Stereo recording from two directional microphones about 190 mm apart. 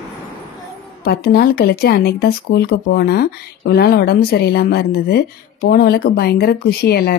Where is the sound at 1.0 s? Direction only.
55° left (ahead or behind).